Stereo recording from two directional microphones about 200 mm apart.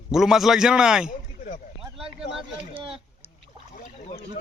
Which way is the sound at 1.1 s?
40° left (ahead or behind).